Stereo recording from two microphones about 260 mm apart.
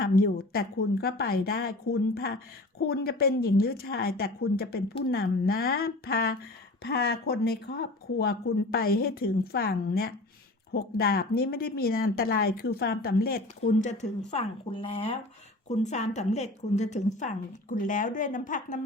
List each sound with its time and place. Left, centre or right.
0.0 s a woman's voice: left